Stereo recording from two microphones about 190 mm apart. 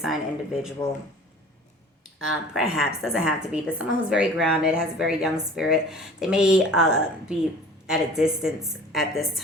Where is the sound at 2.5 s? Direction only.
Centre (ahead or behind).